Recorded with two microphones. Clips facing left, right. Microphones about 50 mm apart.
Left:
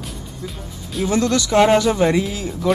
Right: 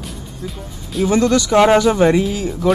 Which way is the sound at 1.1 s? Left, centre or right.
Right.